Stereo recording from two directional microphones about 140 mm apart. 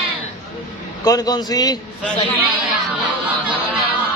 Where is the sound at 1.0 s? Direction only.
25° left (ahead or behind).